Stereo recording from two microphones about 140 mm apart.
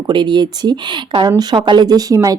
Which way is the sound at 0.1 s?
35° right (ahead or behind).